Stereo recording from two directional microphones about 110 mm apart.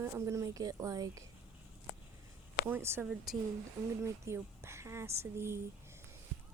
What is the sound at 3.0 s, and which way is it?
Speech, 5° right (ahead or behind).